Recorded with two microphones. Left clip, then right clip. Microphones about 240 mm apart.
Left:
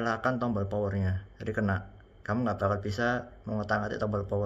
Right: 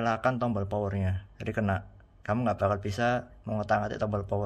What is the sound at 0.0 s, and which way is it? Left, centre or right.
Speech, right.